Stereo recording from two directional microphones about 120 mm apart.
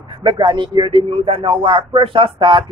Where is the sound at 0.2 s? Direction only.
40° right (ahead or behind).